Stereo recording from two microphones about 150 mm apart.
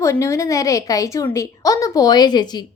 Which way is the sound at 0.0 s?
20° left (ahead or behind).